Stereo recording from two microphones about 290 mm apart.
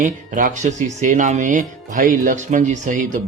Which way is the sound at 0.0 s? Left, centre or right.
Right.